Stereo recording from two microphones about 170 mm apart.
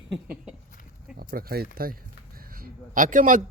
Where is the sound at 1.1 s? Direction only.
60° right (ahead or behind).